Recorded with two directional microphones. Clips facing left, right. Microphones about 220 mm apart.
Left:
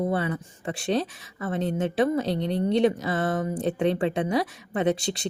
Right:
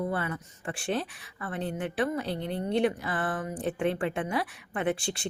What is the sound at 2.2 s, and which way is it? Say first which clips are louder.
Speech: left 6 dB; 90° left.